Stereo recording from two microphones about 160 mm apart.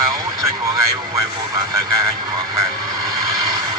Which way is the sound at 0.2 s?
20° right (ahead or behind).